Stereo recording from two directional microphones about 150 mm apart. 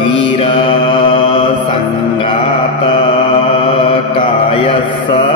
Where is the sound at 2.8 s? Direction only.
35° left (ahead or behind).